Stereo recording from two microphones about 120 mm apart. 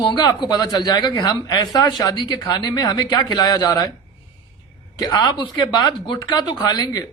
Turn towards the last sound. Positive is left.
turn(degrees=35)  # may be behind; listen again after turning